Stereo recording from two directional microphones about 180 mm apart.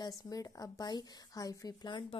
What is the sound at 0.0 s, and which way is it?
A woman's voice, 20° left (ahead or behind).